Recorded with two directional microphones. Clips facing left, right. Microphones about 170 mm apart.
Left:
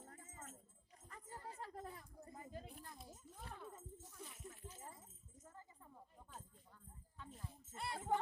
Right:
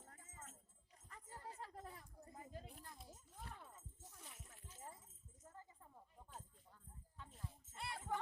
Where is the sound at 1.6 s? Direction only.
50° left (ahead or behind).